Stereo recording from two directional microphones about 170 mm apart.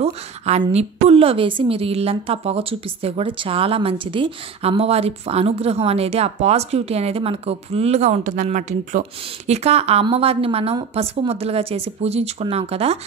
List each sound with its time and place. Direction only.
0.0 s a woman's voice: 35° right (ahead or behind)